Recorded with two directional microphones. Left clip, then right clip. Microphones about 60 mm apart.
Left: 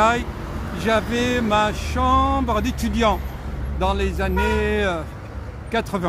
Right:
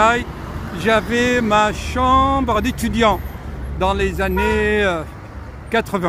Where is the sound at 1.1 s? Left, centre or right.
Right.